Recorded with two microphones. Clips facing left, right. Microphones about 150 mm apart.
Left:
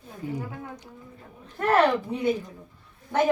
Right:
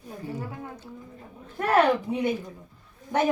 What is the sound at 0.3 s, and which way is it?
Speech, 15° left (ahead or behind).